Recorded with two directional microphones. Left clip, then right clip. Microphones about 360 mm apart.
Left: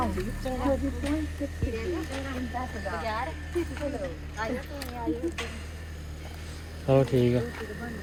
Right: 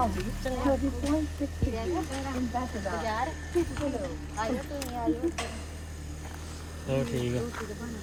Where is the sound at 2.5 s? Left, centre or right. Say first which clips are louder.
Even; right.